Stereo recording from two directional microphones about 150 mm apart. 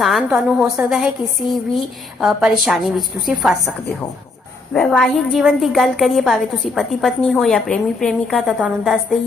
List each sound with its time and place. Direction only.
0.0 s a woman's voice: centre (ahead or behind)
4.7 s a woman's voice: 5° left (ahead or behind)